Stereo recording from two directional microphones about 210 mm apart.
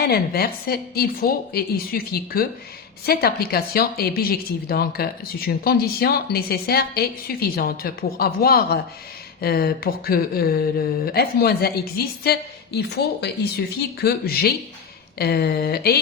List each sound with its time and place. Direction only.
0.0 s speech: 50° left (ahead or behind)